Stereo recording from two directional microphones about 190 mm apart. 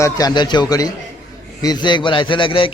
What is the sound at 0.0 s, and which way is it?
A man's voice, 20° left (ahead or behind).